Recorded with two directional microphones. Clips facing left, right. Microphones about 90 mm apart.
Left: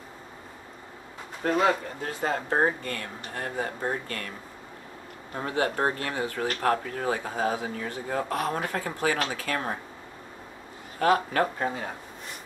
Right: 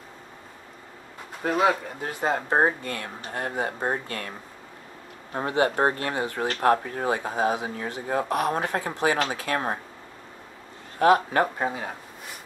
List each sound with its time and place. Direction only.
1.4 s speech: 5° right (ahead or behind)
2.0 s speech: 20° right (ahead or behind)
5.8 s speech: 30° right (ahead or behind)
11.0 s speech: 20° right (ahead or behind)